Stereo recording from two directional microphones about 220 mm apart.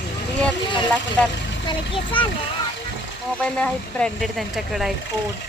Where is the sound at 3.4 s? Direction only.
5° left (ahead or behind).